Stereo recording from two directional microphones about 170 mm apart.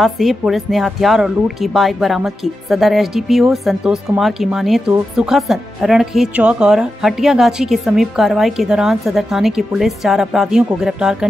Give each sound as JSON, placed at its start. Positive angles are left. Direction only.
{"t": 0.0, "sound": "speech", "side_deg": 0}